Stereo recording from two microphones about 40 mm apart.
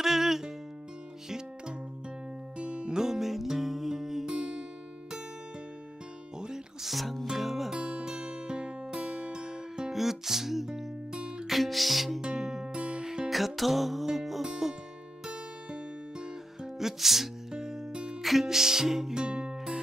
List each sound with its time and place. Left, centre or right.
0.0 s music: centre
2.6 s music: right
3.0 s music: centre
6.8 s music: centre
7.7 s music: centre
9.9 s music: centre
12.2 s music: centre
13.3 s music: centre
16.7 s music: centre